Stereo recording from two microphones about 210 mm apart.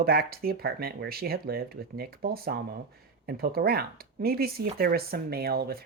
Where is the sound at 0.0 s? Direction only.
45° right (ahead or behind).